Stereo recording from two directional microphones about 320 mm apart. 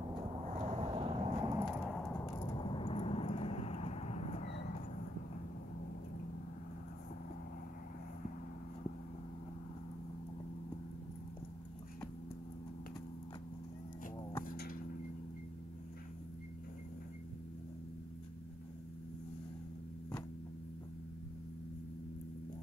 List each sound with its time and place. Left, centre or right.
0.6 s vehicle: centre
1.7 s a sound: centre
2.2 s vehicle: centre
14.4 s tick-tock: left